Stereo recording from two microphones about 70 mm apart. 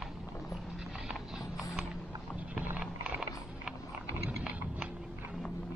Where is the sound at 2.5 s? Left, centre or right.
Centre.